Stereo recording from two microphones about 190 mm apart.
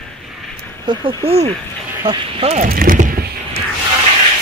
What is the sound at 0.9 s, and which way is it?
Speech, 25° right (ahead or behind).